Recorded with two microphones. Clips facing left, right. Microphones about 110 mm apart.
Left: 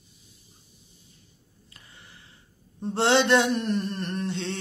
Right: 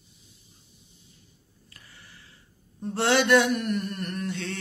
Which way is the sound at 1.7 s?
25° left (ahead or behind).